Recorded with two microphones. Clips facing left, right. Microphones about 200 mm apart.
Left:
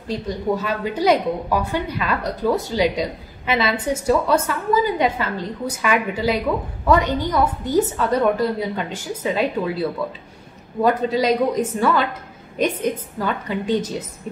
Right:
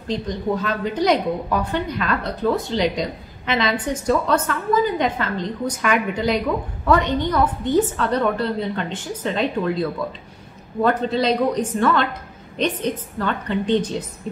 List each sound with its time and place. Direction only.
0.1 s a woman's voice: 10° left (ahead or behind)